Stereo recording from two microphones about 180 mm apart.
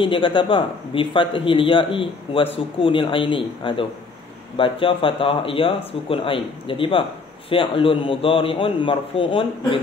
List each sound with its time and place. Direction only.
0.0 s speech: 30° left (ahead or behind)